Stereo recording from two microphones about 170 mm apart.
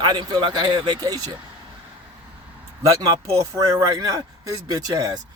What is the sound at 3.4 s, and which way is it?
A man's voice, 20° right (ahead or behind).